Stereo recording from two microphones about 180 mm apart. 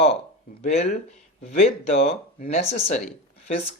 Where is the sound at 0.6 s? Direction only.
35° left (ahead or behind).